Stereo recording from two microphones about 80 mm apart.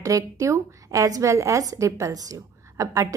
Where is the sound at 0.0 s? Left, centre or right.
Right.